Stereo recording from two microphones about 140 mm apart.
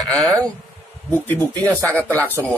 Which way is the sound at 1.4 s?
25° right (ahead or behind).